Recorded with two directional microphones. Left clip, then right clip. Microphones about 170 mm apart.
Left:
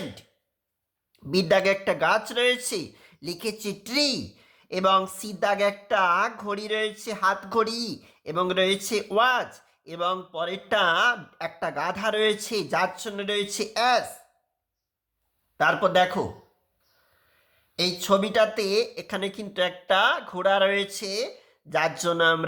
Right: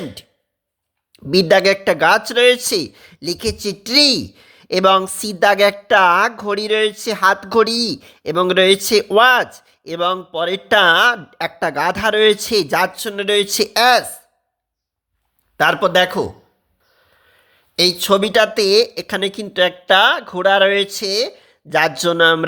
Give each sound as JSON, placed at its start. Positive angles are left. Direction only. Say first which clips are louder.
{"t": 1.1, "sound": "speech", "louder": "right 9 dB", "side_deg": -35}
{"t": 15.5, "sound": "speech", "louder": "right 7 dB", "side_deg": -50}
{"t": 17.7, "sound": "speech", "louder": "right 9 dB", "side_deg": -50}